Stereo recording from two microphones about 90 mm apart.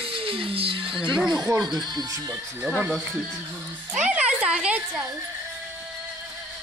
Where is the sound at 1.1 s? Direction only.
5° right (ahead or behind).